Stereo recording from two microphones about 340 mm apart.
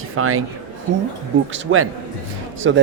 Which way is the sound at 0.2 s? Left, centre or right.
Right.